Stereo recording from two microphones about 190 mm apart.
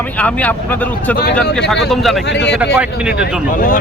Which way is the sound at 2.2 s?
65° left (ahead or behind).